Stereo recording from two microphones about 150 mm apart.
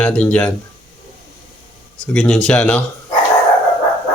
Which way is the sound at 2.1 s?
5° left (ahead or behind).